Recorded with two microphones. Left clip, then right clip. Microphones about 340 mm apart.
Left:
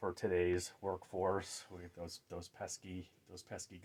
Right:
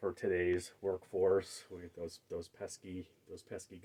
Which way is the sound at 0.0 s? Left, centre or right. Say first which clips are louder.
Right 1 dB; left.